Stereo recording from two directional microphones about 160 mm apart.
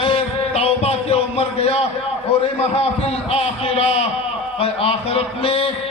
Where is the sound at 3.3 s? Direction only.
40° left (ahead or behind).